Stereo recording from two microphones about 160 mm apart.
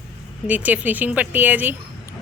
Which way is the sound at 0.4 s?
10° right (ahead or behind).